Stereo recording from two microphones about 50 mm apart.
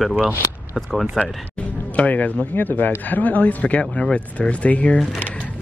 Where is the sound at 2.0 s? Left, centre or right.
Left.